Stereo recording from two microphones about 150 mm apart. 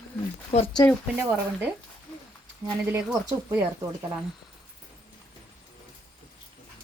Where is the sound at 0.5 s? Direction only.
45° left (ahead or behind).